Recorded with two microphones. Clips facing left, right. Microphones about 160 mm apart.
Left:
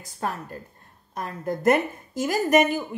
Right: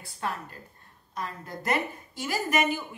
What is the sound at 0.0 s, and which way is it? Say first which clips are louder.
Speech: left 3 dB; 45° left (ahead or behind).